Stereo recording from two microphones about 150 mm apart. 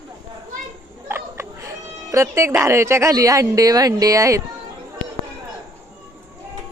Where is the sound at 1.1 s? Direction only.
15° right (ahead or behind).